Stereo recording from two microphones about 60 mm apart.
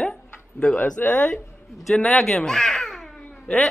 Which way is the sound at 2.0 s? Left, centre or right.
Centre.